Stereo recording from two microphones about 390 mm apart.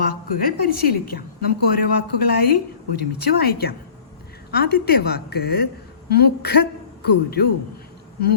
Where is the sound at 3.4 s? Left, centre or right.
Left.